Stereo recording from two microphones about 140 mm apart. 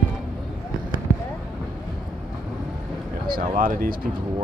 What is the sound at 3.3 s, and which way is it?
Speech, 90° right.